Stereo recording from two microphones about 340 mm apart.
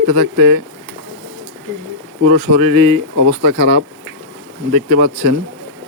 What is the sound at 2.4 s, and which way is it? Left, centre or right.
Speech, right.